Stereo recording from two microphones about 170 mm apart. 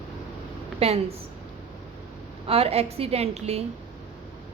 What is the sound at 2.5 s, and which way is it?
A woman's voice, 35° right (ahead or behind).